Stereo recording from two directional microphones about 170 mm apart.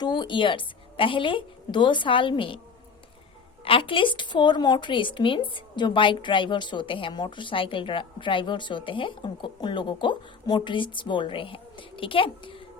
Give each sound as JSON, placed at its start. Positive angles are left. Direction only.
{"t": 0.0, "sound": "speech", "side_deg": 25}
{"t": 3.6, "sound": "speech", "side_deg": 30}